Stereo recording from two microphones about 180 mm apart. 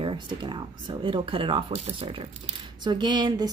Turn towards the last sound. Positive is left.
turn(degrees=-25)  # may be behind; listen again after turning